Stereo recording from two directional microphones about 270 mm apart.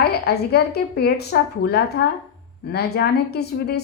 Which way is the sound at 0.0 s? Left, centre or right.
Left.